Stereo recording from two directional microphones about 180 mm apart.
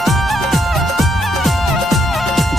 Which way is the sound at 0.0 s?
Centre (ahead or behind).